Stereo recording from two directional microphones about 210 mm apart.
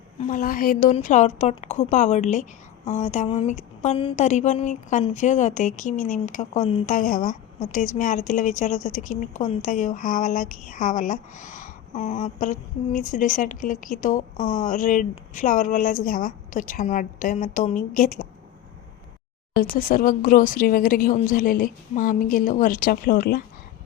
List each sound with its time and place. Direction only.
0.2 s a woman's voice: 40° left (ahead or behind)
19.7 s a woman's voice: 40° left (ahead or behind)